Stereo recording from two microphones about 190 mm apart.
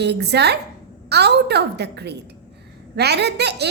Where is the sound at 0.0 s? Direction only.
60° right (ahead or behind).